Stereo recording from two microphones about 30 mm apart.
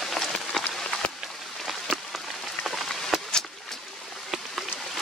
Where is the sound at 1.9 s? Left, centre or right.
Left.